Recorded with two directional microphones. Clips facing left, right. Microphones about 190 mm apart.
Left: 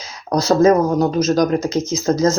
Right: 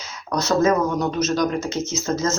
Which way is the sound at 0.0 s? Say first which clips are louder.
Left 5 dB; 35° left (ahead or behind).